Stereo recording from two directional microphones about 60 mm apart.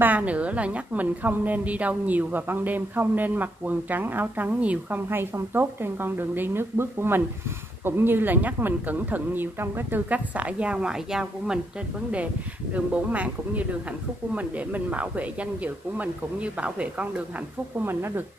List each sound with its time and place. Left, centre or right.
0.0 s a woman's voice: right
5.1 s a woman's voice: right; by 11.6 s centre
12.7 s a woman's voice: right
17.7 s speech: right